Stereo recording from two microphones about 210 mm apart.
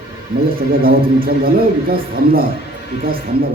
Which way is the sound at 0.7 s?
45° right (ahead or behind).